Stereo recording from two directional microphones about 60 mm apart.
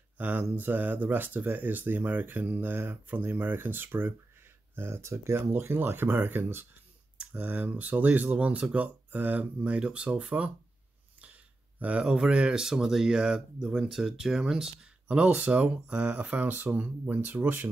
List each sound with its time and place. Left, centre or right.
0.2 s speech: right
12.0 s speech: centre
15.0 s speech: right